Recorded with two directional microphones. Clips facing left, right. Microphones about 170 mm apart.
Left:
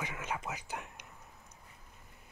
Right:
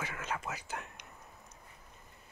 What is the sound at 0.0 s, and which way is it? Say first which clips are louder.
Whispering: even; 15° left (ahead or behind).